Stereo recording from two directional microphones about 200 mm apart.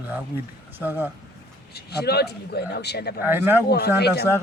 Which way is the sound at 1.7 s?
55° left (ahead or behind).